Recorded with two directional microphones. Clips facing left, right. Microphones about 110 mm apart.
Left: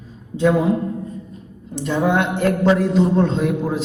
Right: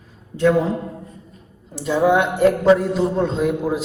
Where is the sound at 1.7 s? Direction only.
Centre (ahead or behind).